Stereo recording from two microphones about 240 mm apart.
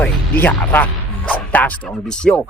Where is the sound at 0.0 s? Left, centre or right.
Centre.